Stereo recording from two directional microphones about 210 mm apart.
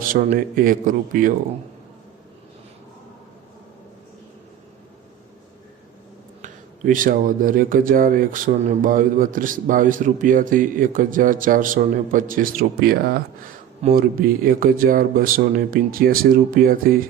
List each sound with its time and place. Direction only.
0.0 s speech: 40° right (ahead or behind)
6.4 s speech: 40° right (ahead or behind)